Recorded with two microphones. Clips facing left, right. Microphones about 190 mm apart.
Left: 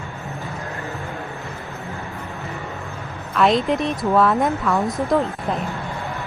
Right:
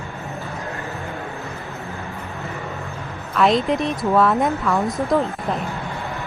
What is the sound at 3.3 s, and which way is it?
Speech, centre (ahead or behind).